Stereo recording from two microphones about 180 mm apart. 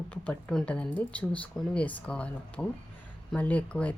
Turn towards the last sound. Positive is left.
turn(degrees=5)  # may be behind; listen again after turning